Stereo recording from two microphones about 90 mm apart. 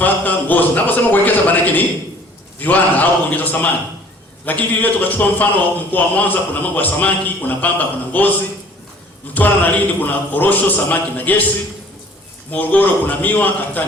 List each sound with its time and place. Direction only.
0.0 s a man's voice: 20° left (ahead or behind)
9.3 s speech: 20° left (ahead or behind)
12.5 s speech: 20° left (ahead or behind)